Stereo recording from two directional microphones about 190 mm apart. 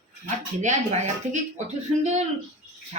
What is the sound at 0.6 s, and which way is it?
Speech, 40° right (ahead or behind).